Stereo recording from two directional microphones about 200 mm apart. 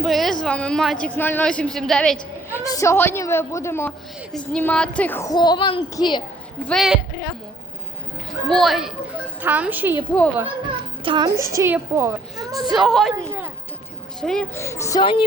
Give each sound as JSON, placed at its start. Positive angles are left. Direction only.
{"t": 0.0, "sound": "a woman's voice", "side_deg": 0}
{"t": 2.5, "sound": "a woman's voice", "side_deg": 15}
{"t": 6.7, "sound": "a woman's voice", "side_deg": 0}
{"t": 8.4, "sound": "a woman's voice", "side_deg": 0}
{"t": 11.0, "sound": "a child's voice", "side_deg": -25}
{"t": 11.3, "sound": "a woman's voice", "side_deg": -15}
{"t": 12.7, "sound": "a woman's voice", "side_deg": 0}
{"t": 14.2, "sound": "a child's voice", "side_deg": 0}
{"t": 14.5, "sound": "a woman's voice", "side_deg": 15}